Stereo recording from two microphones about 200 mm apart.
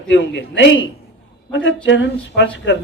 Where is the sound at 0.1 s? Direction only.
60° left (ahead or behind).